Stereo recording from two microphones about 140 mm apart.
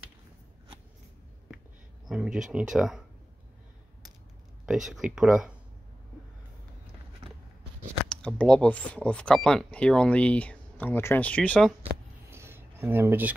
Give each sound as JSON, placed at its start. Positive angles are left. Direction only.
{"t": 2.0, "sound": "speech", "side_deg": -5}
{"t": 4.6, "sound": "speech", "side_deg": -5}
{"t": 8.1, "sound": "speech", "side_deg": 5}
{"t": 12.3, "sound": "a sound", "side_deg": -15}